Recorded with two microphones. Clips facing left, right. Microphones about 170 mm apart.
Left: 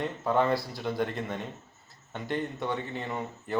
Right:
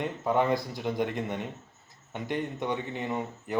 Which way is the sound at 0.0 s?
15° right (ahead or behind).